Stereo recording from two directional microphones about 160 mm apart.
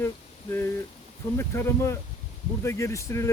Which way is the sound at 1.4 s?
15° left (ahead or behind).